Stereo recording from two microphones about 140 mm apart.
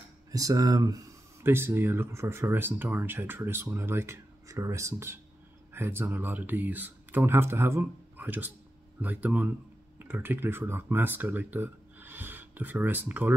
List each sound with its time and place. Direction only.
0.3 s speech: 25° right (ahead or behind)